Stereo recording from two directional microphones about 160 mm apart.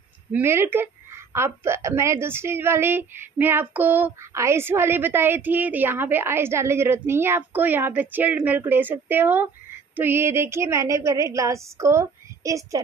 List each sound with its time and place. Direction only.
0.3 s a woman's voice: 15° right (ahead or behind)